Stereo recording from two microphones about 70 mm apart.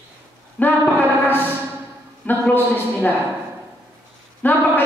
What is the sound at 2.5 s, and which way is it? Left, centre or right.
Speech, left.